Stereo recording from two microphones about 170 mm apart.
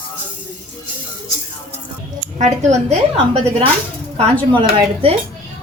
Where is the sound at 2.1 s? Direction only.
45° right (ahead or behind).